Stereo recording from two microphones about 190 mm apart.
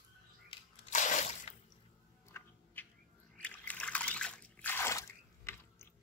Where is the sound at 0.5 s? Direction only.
30° left (ahead or behind).